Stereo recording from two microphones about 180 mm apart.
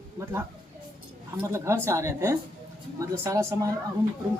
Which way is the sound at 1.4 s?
15° right (ahead or behind).